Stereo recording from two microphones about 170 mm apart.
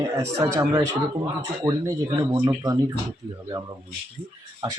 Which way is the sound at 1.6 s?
20° right (ahead or behind).